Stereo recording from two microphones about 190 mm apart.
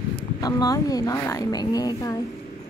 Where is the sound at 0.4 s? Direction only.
20° left (ahead or behind).